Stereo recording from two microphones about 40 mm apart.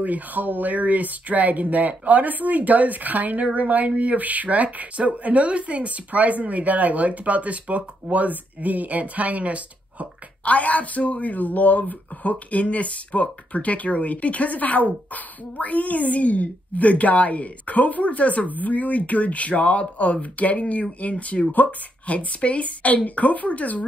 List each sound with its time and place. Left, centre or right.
0.0 s speech: right
10.4 s a woman's voice: left